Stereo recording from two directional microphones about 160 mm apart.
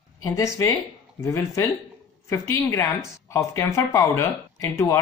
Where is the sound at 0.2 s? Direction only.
15° left (ahead or behind).